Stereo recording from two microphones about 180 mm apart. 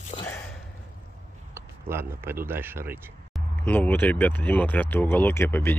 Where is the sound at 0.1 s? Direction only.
30° left (ahead or behind).